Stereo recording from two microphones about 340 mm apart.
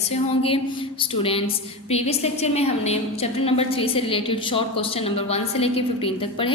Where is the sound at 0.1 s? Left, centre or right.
Centre.